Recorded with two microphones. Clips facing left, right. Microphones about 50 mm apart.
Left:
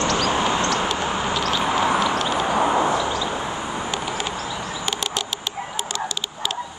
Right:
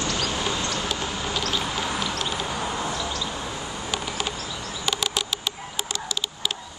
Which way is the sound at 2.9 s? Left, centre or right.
Centre.